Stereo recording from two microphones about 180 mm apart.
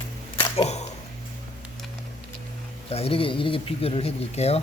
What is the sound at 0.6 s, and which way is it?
Speech, 40° left (ahead or behind).